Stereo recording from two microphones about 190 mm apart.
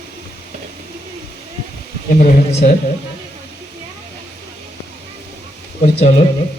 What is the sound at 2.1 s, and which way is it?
Speech, 35° left (ahead or behind).